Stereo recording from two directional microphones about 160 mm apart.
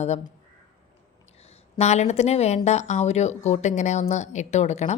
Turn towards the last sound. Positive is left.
turn(degrees=45)  # may be behind; listen again after turning